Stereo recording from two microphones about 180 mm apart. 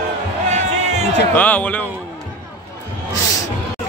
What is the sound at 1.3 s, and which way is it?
Speech, 10° left (ahead or behind).